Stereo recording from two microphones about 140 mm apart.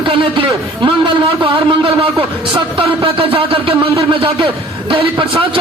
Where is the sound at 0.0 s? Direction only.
40° right (ahead or behind).